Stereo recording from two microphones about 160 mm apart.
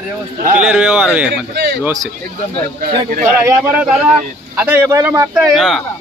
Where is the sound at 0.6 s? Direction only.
5° right (ahead or behind).